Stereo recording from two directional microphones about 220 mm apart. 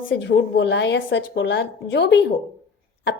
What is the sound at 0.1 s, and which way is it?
Speech, 55° left (ahead or behind).